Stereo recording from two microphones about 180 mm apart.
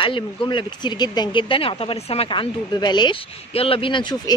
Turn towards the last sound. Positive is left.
turn(degrees=25)  # may be behind; listen again after turning